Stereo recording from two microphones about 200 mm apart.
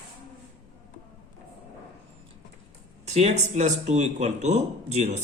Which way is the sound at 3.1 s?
35° right (ahead or behind).